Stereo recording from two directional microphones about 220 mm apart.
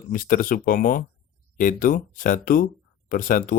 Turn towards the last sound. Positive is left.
turn(degrees=40)  # may be behind; listen again after turning